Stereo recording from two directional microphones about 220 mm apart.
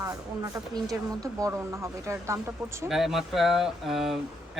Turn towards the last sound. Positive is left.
turn(degrees=0)  # may be behind; listen again after turning